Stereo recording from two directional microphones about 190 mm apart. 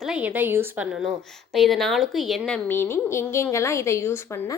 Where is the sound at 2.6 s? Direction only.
10° left (ahead or behind).